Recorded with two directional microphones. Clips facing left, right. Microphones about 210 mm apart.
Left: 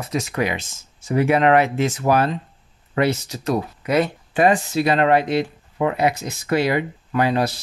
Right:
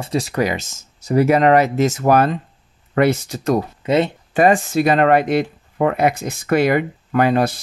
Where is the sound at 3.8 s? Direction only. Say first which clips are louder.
Right 2 dB; 25° right (ahead or behind).